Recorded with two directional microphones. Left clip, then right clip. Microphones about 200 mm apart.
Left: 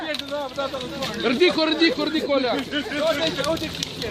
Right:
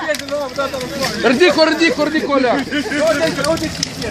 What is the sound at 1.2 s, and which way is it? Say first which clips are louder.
Speech: right 8 dB; 45° right (ahead or behind).